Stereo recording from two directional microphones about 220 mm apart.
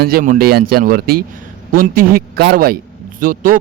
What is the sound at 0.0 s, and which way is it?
A man's voice, 40° right (ahead or behind).